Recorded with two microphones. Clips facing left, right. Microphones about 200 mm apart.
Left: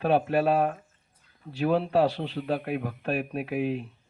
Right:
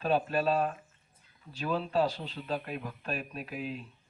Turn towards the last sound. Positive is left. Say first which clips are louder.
# left 10 dB
turn(degrees=65)  # may be behind; listen again after turning